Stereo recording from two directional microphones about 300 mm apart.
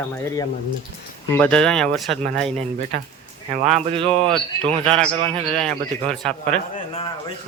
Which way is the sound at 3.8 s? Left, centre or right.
Centre.